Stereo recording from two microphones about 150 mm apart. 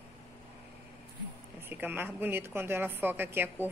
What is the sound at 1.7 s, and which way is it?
A woman's voice, 15° right (ahead or behind).